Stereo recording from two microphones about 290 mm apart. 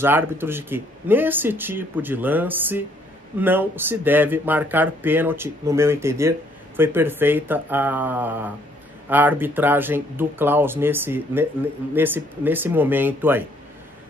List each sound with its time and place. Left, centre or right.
0.0 s speech: centre